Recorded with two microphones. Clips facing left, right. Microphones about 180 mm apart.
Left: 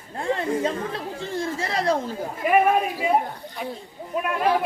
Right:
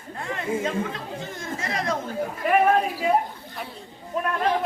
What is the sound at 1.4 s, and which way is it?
Speech, 30° left (ahead or behind).